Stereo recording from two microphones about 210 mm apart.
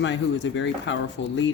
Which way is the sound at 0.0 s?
60° left (ahead or behind).